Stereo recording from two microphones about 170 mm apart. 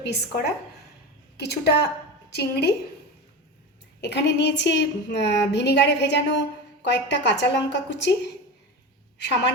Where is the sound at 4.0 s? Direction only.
85° left.